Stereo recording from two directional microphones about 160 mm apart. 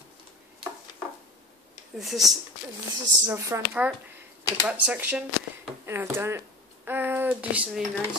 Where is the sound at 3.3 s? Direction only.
20° right (ahead or behind).